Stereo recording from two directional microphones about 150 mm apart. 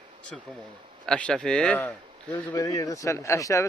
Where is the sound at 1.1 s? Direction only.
5° left (ahead or behind).